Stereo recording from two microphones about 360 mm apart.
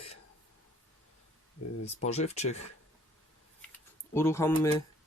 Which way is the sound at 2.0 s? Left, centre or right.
Centre.